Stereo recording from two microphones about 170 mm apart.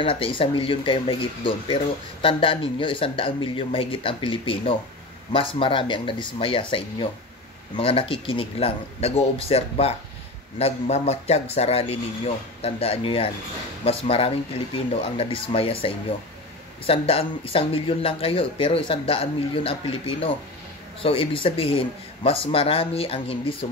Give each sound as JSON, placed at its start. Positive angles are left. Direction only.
{"t": 0.0, "sound": "speech", "side_deg": 30}
{"t": 21.0, "sound": "speech", "side_deg": 30}